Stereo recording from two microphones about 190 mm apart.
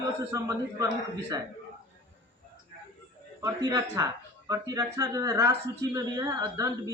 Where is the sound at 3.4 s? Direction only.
20° right (ahead or behind).